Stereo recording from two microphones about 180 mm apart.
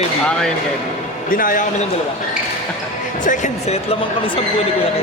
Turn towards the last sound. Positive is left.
turn(degrees=40)  # may be behind; listen again after turning